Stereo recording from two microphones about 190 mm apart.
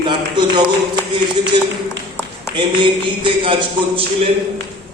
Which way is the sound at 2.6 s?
25° right (ahead or behind).